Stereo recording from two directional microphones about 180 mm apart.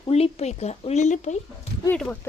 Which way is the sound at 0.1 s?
35° left (ahead or behind).